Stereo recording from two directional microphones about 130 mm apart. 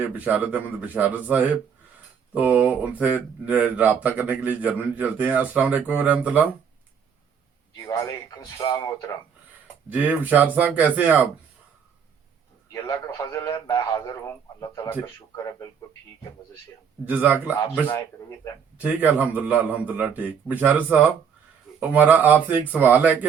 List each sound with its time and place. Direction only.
0.0 s speech: 10° right (ahead or behind)
7.8 s speech: 25° left (ahead or behind)
9.9 s speech: 10° right (ahead or behind)
12.7 s a man's voice: 25° left (ahead or behind)
17.1 s speech: 15° right (ahead or behind)
17.8 s speech: 20° left (ahead or behind)
18.8 s speech: 15° right (ahead or behind)